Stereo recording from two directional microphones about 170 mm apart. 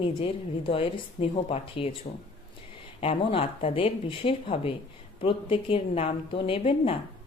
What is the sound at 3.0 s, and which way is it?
A woman's voice, 35° left (ahead or behind).